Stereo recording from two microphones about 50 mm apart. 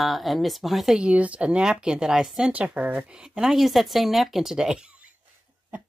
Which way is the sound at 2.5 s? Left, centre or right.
Right.